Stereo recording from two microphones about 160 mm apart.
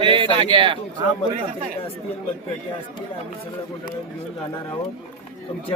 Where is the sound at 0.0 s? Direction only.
30° right (ahead or behind).